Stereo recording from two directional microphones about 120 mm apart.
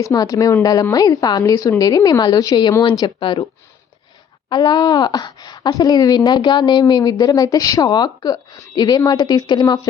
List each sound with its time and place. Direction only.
0.0 s speech: 30° left (ahead or behind)
4.4 s speech: 35° left (ahead or behind)